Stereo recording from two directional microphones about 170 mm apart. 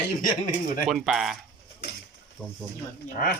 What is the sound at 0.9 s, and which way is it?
Speech, centre (ahead or behind).